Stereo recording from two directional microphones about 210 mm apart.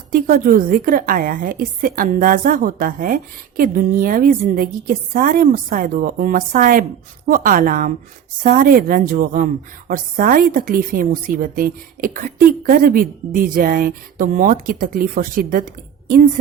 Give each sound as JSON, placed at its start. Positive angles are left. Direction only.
{"t": 0.1, "sound": "a woman's voice", "side_deg": -40}